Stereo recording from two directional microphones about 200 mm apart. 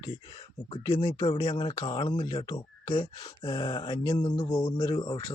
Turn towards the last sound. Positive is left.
turn(degrees=20)  # may be behind; listen again after turning